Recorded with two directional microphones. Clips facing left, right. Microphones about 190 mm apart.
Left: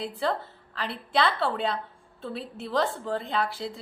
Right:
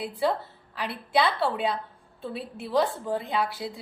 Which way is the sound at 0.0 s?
5° right (ahead or behind).